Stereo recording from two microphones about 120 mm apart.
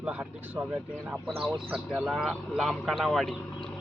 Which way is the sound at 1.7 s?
10° right (ahead or behind).